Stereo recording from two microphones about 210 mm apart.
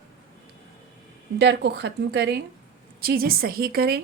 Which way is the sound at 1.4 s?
55° right (ahead or behind).